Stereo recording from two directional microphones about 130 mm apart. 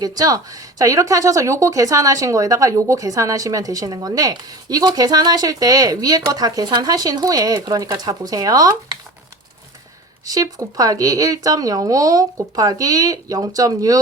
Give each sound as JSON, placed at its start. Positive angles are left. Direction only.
{"t": 0.0, "sound": "speech", "side_deg": -30}
{"t": 10.2, "sound": "speech", "side_deg": -25}